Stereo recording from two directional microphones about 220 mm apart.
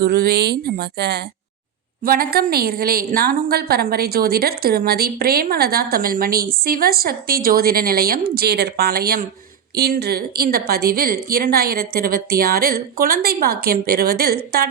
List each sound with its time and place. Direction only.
0.0 s a woman's voice: 45° right (ahead or behind)